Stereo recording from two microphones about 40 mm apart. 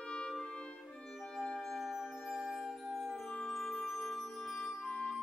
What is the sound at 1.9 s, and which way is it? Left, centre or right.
Music, centre.